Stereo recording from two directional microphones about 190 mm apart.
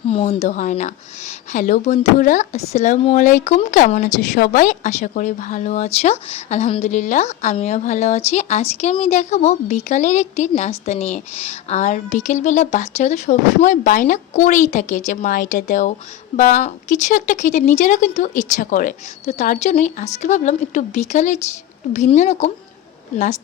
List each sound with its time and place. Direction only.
0.1 s speech: 35° left (ahead or behind)